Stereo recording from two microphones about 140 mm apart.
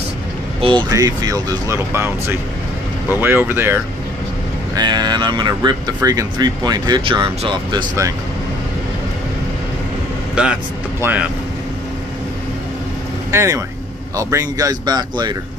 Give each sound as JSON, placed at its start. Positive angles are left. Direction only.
{"t": 0.6, "sound": "speech", "side_deg": -35}
{"t": 0.8, "sound": "speech", "side_deg": -25}
{"t": 4.7, "sound": "speech", "side_deg": -30}
{"t": 10.3, "sound": "speech", "side_deg": -5}
{"t": 13.3, "sound": "speech", "side_deg": -20}